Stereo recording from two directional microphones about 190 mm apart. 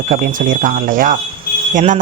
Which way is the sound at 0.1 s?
45° right (ahead or behind).